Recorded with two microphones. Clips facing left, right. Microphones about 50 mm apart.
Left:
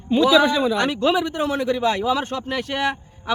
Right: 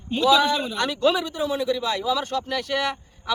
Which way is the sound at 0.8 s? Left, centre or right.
Left.